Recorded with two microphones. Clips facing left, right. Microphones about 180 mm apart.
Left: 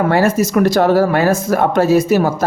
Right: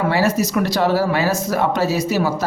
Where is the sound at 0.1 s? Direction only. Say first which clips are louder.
Left 4 dB; 50° left (ahead or behind).